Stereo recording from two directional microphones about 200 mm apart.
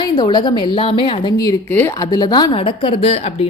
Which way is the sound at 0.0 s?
20° left (ahead or behind).